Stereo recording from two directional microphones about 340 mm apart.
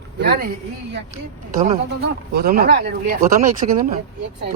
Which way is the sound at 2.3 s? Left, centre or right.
Right.